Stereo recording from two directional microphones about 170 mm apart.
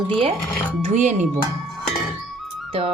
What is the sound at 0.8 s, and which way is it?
Speech, 45° right (ahead or behind).